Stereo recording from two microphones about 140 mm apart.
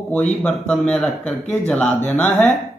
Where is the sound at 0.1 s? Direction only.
5° left (ahead or behind).